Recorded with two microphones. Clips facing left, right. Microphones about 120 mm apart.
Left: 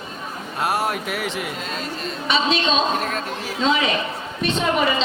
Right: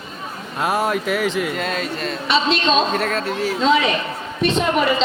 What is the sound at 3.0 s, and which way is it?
Speech, 90° right.